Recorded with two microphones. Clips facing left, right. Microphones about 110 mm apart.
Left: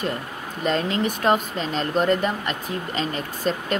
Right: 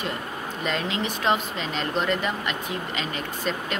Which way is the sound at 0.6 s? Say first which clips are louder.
Left 5 dB; 40° left (ahead or behind).